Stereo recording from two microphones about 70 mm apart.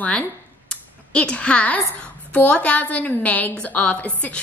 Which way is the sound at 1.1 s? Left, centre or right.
Centre.